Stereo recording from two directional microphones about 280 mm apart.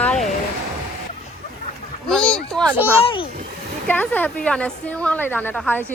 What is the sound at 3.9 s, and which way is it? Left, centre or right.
A woman's voice, centre.